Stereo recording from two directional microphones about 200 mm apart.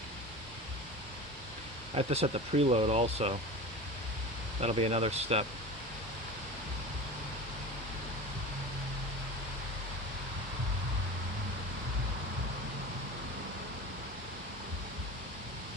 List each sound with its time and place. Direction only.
2.0 s speech: 30° right (ahead or behind)
4.6 s speech: 30° right (ahead or behind)